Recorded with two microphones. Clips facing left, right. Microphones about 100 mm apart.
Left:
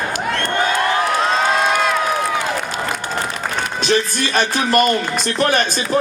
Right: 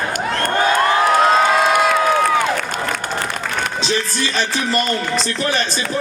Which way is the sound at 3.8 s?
55° left (ahead or behind).